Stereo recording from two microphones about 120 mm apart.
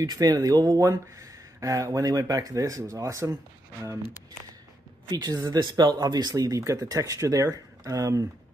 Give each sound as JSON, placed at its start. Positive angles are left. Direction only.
{"t": 0.0, "sound": "speech", "side_deg": -35}
{"t": 5.1, "sound": "speech", "side_deg": -35}